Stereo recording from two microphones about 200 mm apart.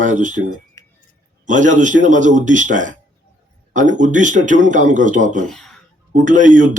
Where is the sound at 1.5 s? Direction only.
40° right (ahead or behind).